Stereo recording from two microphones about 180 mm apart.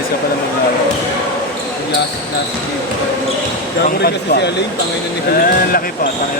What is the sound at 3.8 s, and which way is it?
Speech, 65° left (ahead or behind).